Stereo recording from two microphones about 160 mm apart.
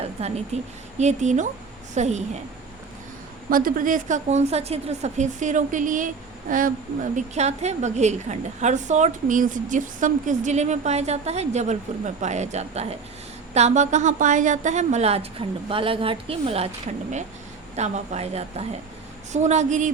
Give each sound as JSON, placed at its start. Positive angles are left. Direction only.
{"t": 0.2, "sound": "a woman's voice", "side_deg": -40}
{"t": 3.5, "sound": "a woman's voice", "side_deg": -60}
{"t": 17.7, "sound": "a woman's voice", "side_deg": -45}